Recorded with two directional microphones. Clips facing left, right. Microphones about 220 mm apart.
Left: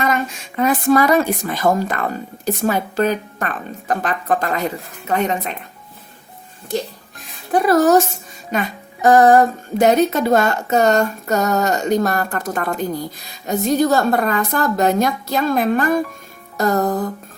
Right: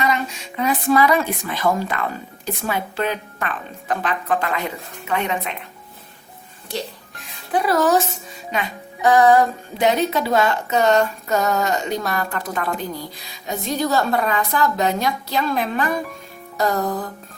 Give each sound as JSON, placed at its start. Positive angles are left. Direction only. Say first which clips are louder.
{"t": 0.0, "sound": "speech", "louder": "left 2 dB", "side_deg": 50}
{"t": 7.5, "sound": "speech", "louder": "left 5 dB", "side_deg": 45}